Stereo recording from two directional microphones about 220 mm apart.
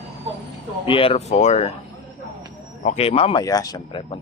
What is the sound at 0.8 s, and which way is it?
Speech, 25° left (ahead or behind).